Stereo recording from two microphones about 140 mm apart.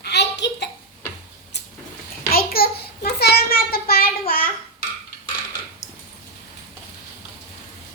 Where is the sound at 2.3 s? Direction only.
90° left.